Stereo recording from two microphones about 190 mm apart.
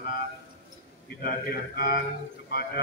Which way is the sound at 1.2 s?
55° left (ahead or behind).